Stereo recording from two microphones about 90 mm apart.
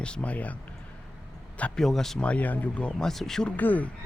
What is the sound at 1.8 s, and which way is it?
Speech, 5° left (ahead or behind).